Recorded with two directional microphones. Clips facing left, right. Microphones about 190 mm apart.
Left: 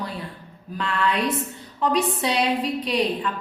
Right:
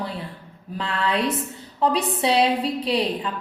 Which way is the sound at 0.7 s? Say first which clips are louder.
Even; 30° right (ahead or behind).